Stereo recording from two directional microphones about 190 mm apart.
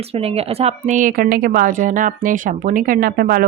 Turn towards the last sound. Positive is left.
turn(degrees=-50)  # may be behind; listen again after turning